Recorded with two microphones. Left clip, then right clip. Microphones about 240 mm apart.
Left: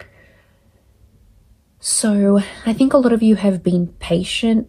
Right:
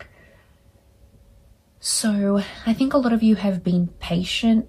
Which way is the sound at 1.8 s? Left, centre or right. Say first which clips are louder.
Left 5 dB; left.